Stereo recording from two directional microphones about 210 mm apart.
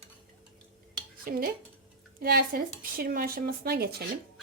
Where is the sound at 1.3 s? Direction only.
45° right (ahead or behind).